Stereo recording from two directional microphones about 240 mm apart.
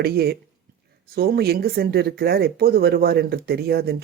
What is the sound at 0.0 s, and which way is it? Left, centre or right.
Speech, right.